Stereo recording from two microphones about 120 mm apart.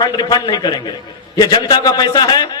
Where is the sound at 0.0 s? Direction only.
35° left (ahead or behind).